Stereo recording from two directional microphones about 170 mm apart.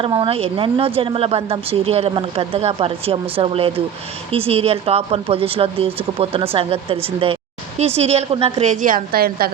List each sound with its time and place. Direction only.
0.0 s speech: 30° right (ahead or behind); by 9.5 s 60° right (ahead or behind)